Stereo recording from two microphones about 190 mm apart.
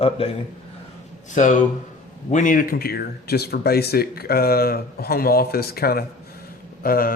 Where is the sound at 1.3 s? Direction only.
40° left (ahead or behind).